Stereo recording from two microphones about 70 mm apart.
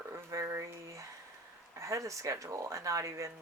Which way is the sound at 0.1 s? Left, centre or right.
Right.